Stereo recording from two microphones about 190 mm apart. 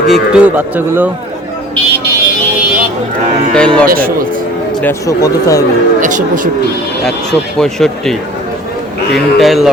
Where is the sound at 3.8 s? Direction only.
50° right (ahead or behind).